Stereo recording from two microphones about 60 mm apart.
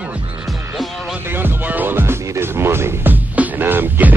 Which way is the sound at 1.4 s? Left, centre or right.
Right.